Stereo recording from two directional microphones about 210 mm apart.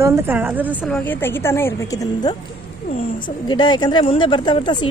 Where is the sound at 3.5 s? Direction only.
20° left (ahead or behind).